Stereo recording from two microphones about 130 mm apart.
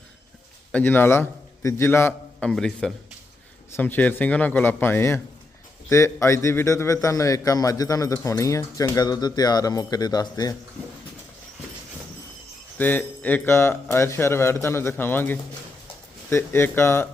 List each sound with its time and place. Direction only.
0.7 s a man's voice: 15° left (ahead or behind)
2.4 s a man's voice: 5° left (ahead or behind); by 10.5 s 30° left (ahead or behind)
12.7 s a man's voice: 15° left (ahead or behind)